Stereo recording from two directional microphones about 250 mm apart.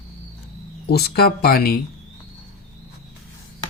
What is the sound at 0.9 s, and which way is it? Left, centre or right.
Speech, left.